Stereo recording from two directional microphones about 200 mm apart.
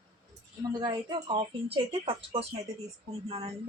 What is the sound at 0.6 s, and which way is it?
Speech, 20° right (ahead or behind).